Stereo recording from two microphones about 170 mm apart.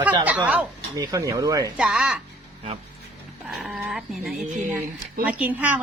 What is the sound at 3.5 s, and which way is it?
A woman's voice, 5° right (ahead or behind).